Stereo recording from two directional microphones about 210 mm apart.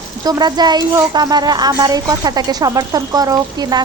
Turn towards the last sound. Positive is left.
turn(degrees=-20)  # may be behind; listen again after turning